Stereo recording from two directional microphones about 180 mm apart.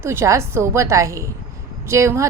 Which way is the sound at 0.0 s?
15° right (ahead or behind).